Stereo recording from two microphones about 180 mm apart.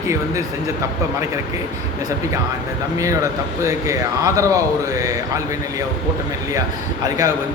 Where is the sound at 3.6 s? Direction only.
15° right (ahead or behind).